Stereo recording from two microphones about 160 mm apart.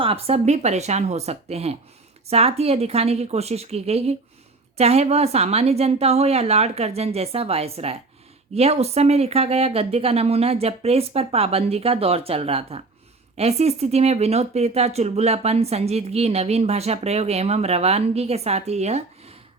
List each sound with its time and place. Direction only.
0.0 s speech: 35° right (ahead or behind)